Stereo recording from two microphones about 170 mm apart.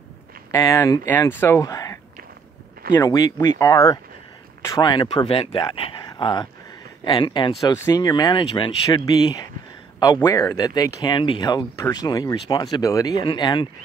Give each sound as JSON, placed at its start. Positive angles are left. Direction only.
{"t": 0.5, "sound": "speech", "side_deg": 20}